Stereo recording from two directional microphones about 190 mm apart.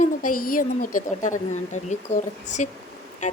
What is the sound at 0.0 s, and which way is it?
A woman's voice, 45° left (ahead or behind).